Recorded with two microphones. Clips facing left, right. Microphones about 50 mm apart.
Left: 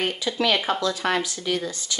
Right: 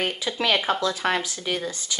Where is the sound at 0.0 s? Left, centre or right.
Centre.